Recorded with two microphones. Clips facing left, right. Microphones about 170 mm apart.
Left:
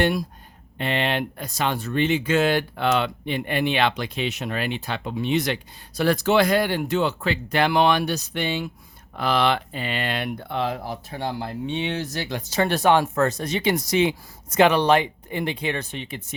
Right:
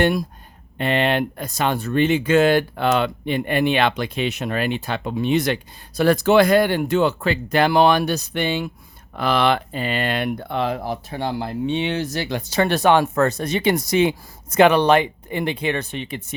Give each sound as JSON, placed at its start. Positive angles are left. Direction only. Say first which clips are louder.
{"t": 0.0, "sound": "speech", "louder": "right 3 dB", "side_deg": -50}